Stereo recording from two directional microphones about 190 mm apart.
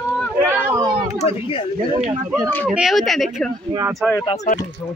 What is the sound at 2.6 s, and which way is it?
Speech, centre (ahead or behind).